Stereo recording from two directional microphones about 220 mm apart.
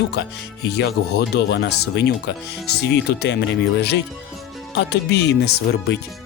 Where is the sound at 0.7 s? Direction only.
50° left (ahead or behind).